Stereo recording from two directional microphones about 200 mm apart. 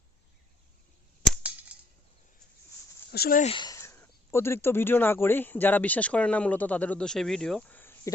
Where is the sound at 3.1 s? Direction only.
45° left (ahead or behind).